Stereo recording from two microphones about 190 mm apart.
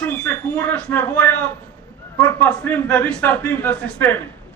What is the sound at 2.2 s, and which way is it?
A man's voice, 5° left (ahead or behind).